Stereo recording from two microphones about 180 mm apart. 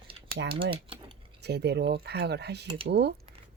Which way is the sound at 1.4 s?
65° right (ahead or behind).